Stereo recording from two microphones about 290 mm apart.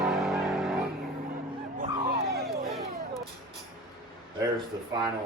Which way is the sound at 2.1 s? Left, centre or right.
Right.